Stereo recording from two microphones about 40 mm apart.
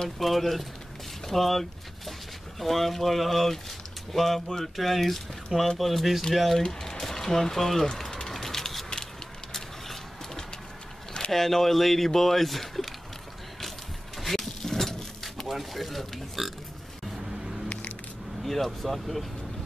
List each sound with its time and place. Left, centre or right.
0.2 s speech: centre
7.8 s a sound: centre
11.3 s speech: centre
14.2 s vehicle: centre
17.1 s vehicle: centre
18.4 s speech: centre